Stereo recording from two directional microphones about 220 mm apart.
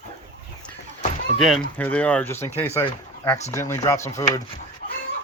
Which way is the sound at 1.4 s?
5° left (ahead or behind).